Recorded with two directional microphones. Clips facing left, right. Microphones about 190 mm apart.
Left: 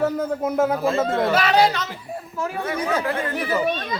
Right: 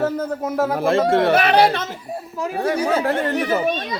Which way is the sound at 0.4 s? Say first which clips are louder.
Left 1 dB; centre (ahead or behind).